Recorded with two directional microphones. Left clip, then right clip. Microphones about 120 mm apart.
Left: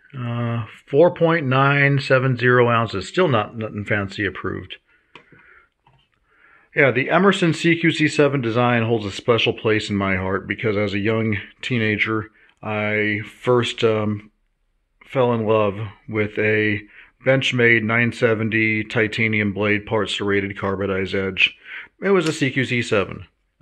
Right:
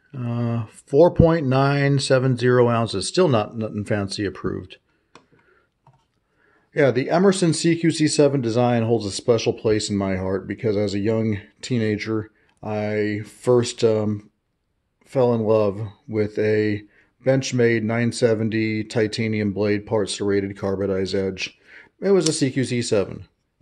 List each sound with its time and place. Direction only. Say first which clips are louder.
0.1 s speech: left 1 dB; 40° right (ahead or behind)
0.8 s speech: even; 55° right (ahead or behind)
4.1 s speech: left 2 dB; 60° right (ahead or behind)
6.7 s speech: left 2 dB; 45° right (ahead or behind)